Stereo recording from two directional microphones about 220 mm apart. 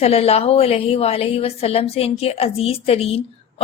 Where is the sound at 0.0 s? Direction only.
25° left (ahead or behind).